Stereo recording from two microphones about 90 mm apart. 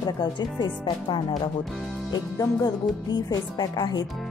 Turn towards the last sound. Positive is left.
turn(degrees=50)  # may be behind; listen again after turning